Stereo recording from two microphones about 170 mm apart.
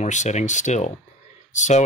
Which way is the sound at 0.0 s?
45° left (ahead or behind).